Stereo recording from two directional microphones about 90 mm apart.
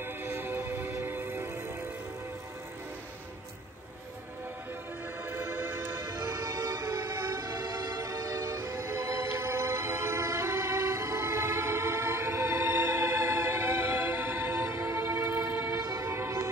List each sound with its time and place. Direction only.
0.0 s music: 20° right (ahead or behind)
5.3 s music: 25° right (ahead or behind)
5.9 s music: 35° right (ahead or behind)
15.8 s train: 35° right (ahead or behind)